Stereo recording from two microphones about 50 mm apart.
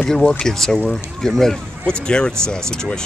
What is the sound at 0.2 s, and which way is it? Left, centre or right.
Speech, left.